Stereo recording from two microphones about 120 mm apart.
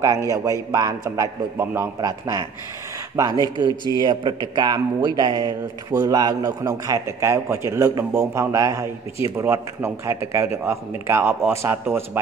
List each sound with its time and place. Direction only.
0.3 s a man's voice: 25° right (ahead or behind)